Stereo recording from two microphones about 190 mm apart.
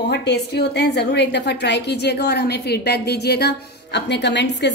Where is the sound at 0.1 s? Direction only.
65° left (ahead or behind).